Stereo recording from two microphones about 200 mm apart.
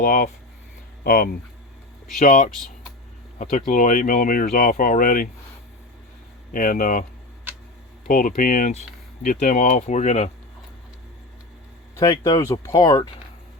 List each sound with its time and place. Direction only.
0.0 s speech: 45° left (ahead or behind)
3.7 s speech: 40° left (ahead or behind)
6.5 s speech: 45° left (ahead or behind)
8.0 s speech: 40° left (ahead or behind)
11.9 s speech: 20° left (ahead or behind)